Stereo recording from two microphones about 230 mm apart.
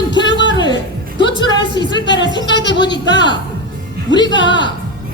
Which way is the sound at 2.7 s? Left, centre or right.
Centre.